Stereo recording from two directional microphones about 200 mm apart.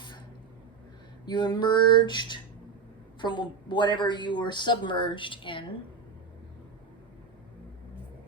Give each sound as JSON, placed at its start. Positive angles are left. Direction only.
{"t": 1.2, "sound": "a woman's voice", "side_deg": 20}